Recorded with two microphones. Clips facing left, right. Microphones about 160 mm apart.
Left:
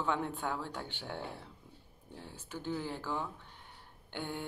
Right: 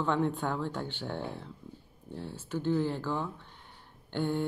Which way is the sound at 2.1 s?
15° left (ahead or behind).